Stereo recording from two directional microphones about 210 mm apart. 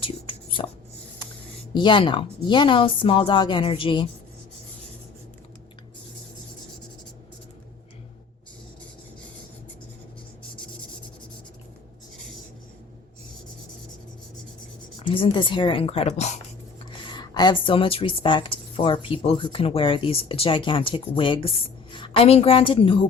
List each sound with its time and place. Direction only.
0.0 s a sound: 25° left (ahead or behind)
1.7 s a woman's voice: 20° left (ahead or behind)
14.9 s speech: 25° left (ahead or behind)
17.1 s a woman's voice: 20° left (ahead or behind)